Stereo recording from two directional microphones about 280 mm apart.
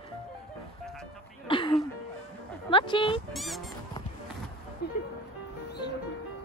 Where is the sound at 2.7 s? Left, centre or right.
Centre.